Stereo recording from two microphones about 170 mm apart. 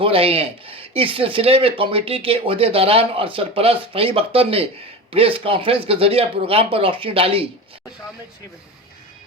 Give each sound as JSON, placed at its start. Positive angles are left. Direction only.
{"t": 0.0, "sound": "speech", "side_deg": -35}